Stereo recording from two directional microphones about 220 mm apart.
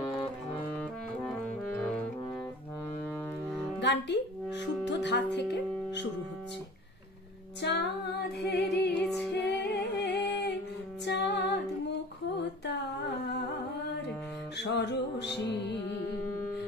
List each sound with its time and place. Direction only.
1.8 s brass instrument: 5° left (ahead or behind)
3.8 s speech: 50° left (ahead or behind)
7.6 s music: 50° left (ahead or behind)
14.6 s music: 50° left (ahead or behind)